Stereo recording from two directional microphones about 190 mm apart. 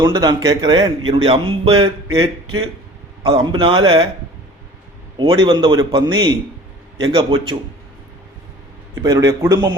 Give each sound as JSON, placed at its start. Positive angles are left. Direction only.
{"t": 0.0, "sound": "speech", "side_deg": -20}
{"t": 5.1, "sound": "speech", "side_deg": -25}
{"t": 9.0, "sound": "a man's voice", "side_deg": -15}